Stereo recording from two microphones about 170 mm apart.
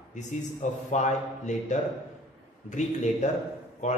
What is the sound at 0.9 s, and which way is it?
Speech, 45° left (ahead or behind).